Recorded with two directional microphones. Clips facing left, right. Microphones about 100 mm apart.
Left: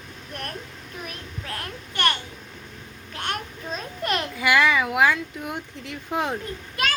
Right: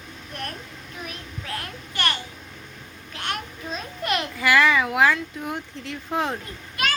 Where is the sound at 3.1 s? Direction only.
40° left (ahead or behind).